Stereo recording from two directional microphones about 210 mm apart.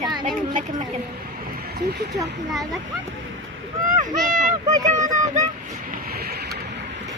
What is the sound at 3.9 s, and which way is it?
Boat, 40° right (ahead or behind).